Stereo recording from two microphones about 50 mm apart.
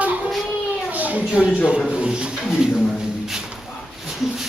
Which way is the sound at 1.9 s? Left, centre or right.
Right.